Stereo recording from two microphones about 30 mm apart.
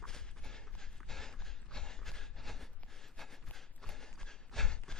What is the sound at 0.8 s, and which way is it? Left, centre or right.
Train, centre.